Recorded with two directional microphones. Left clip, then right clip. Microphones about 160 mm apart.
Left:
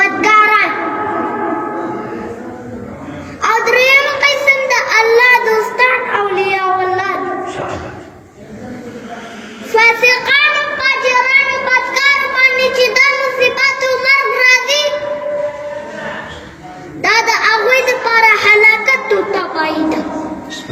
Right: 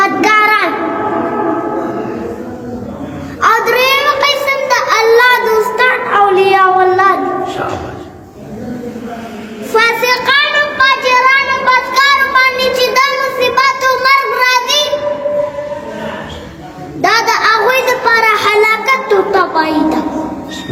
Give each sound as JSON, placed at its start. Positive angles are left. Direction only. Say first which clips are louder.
{"t": 0.2, "sound": "child singing", "louder": "left 2 dB", "side_deg": -30}
{"t": 3.4, "sound": "child singing", "louder": "right 1 dB", "side_deg": -30}
{"t": 9.7, "sound": "child singing", "louder": "left 1 dB", "side_deg": -25}
{"t": 17.0, "sound": "a sound", "louder": "right 1 dB", "side_deg": -25}